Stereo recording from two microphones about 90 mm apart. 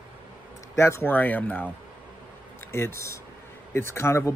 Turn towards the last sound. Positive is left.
turn(degrees=30)  # may be behind; listen again after turning